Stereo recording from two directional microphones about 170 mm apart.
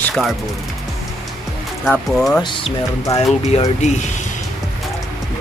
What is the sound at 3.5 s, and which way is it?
Speech, 40° left (ahead or behind).